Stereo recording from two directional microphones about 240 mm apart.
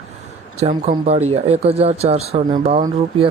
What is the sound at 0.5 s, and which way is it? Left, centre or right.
Speech, right.